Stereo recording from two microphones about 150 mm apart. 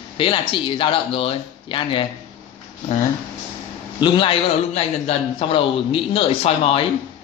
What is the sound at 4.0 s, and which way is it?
A man's voice, 30° left (ahead or behind).